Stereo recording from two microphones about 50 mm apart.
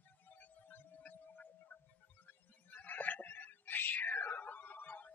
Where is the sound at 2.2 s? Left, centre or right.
Left.